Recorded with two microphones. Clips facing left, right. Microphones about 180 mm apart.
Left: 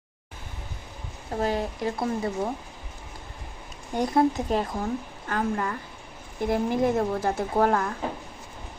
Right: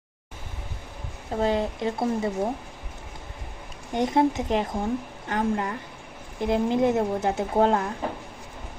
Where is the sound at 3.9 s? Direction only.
20° right (ahead or behind).